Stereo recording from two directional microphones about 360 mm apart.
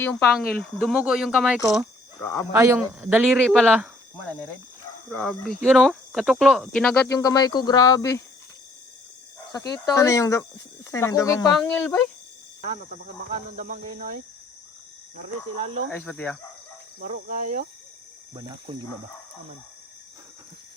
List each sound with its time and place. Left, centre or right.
0.0 s speech: centre
2.5 s speech: centre
5.1 s speech: centre
9.5 s speech: centre
12.6 s speech: centre
15.9 s speech: centre
17.0 s speech: right